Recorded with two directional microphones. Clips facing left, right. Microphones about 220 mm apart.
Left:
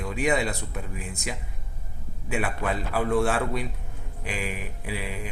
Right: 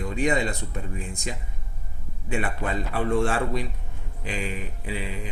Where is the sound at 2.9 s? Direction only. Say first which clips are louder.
Even; 5° left (ahead or behind).